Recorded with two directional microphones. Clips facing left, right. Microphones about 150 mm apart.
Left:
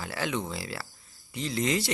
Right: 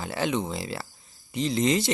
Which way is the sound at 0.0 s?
25° right (ahead or behind).